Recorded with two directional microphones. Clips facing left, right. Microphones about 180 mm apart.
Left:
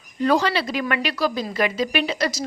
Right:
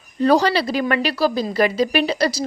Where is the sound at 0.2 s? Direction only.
35° right (ahead or behind).